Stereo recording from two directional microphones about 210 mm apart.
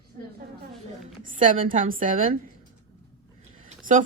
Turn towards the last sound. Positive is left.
turn(degrees=-40)  # may be behind; listen again after turning